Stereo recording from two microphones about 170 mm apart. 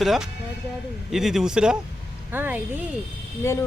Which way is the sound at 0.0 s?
Centre (ahead or behind).